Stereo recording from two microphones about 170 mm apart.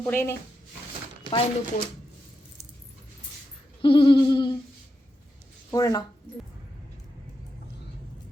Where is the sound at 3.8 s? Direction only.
30° left (ahead or behind).